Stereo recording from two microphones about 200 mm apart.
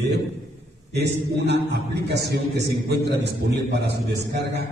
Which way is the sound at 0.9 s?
55° right (ahead or behind).